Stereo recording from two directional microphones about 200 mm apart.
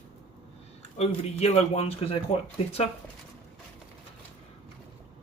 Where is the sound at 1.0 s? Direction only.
30° left (ahead or behind).